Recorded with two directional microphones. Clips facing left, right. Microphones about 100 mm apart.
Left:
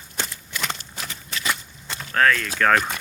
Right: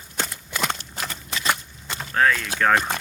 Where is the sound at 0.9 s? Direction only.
55° right (ahead or behind).